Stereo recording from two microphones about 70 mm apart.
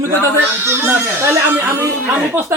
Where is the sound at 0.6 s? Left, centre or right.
Right.